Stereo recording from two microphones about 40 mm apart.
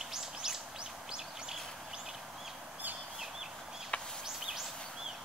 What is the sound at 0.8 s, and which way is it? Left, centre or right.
Bird, centre.